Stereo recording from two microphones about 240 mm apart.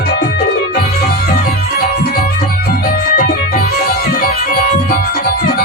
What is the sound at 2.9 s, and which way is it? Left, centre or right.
Music, left.